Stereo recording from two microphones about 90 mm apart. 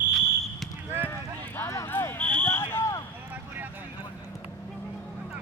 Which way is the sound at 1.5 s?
30° left (ahead or behind).